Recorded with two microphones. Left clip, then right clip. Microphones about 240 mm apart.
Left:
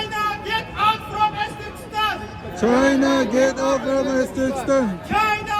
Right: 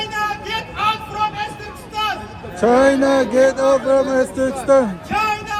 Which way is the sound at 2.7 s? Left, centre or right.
Centre.